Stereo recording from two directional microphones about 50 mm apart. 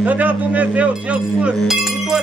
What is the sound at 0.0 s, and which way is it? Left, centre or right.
Speech, right.